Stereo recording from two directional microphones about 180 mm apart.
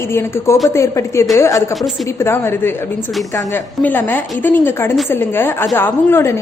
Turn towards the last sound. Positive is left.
turn(degrees=15)  # may be behind; listen again after turning